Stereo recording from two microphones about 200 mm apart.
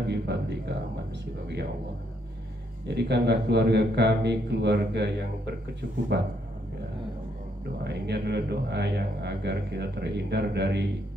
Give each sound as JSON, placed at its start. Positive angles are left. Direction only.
{"t": 0.0, "sound": "a sound", "side_deg": -60}
{"t": 2.9, "sound": "a man's voice", "side_deg": -60}
{"t": 7.8, "sound": "a man's voice", "side_deg": -60}